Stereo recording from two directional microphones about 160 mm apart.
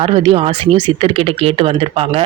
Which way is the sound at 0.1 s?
35° right (ahead or behind).